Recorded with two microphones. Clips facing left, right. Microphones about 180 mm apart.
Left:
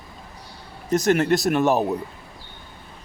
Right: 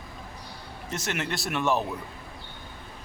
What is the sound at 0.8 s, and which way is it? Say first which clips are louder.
A man's voice: left 13 dB; 40° left (ahead or behind).